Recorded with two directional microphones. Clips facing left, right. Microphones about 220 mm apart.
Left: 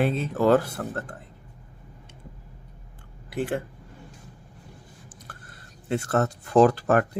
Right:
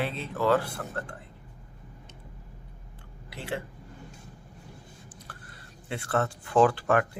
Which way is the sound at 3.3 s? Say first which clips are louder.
Left 7 dB; 50° left (ahead or behind).